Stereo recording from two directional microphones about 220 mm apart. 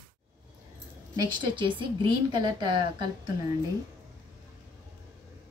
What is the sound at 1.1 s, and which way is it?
A woman's voice, 20° right (ahead or behind).